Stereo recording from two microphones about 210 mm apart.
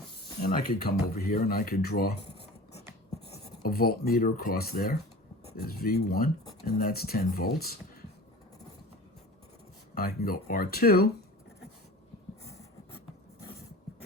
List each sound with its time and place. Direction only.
0.4 s speech: 45° left (ahead or behind)
3.3 s speech: 45° left (ahead or behind)
9.9 s speech: 45° left (ahead or behind)